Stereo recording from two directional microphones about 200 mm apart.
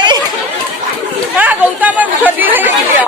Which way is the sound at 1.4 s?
5° right (ahead or behind).